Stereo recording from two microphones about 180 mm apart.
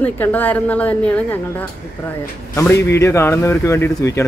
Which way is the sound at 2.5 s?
15° left (ahead or behind).